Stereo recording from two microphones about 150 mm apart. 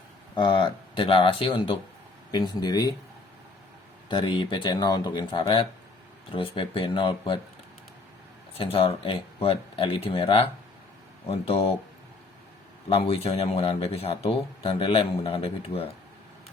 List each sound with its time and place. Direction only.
0.3 s speech: 35° left (ahead or behind)
4.1 s speech: 30° left (ahead or behind)
8.5 s speech: 40° left (ahead or behind)
12.9 s speech: 40° left (ahead or behind)